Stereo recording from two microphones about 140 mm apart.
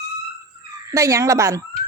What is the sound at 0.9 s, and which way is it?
Speech, 25° right (ahead or behind).